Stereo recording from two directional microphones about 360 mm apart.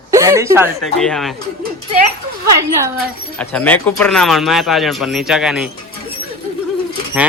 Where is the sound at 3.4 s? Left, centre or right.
Centre.